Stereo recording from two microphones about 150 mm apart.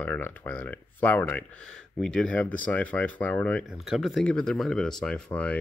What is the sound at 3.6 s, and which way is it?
Speech, 5° right (ahead or behind).